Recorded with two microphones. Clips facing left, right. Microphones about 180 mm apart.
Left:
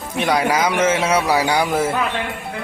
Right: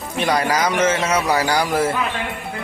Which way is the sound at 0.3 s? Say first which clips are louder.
Left 1 dB; 5° left (ahead or behind).